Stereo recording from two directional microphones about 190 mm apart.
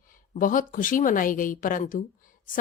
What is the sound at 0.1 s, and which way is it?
A woman's voice, 45° left (ahead or behind).